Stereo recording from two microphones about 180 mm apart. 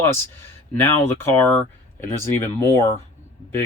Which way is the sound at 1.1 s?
10° left (ahead or behind).